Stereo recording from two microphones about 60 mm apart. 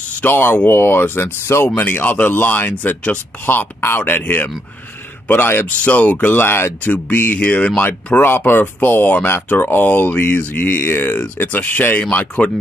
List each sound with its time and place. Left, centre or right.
0.2 s speech: left
1.8 s speech: left
6.4 s speech: left
6.9 s speech: left
8.2 s speech: left